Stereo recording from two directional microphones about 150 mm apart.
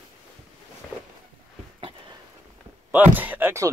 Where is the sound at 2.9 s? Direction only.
10° right (ahead or behind).